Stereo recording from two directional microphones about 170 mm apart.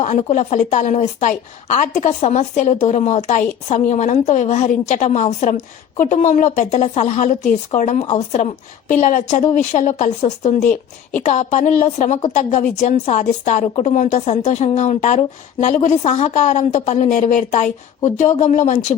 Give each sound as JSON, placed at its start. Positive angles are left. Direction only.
{"t": 0.0, "sound": "a woman's voice", "side_deg": 40}
{"t": 10.6, "sound": "speech", "side_deg": 10}
{"t": 11.3, "sound": "a woman's voice", "side_deg": 45}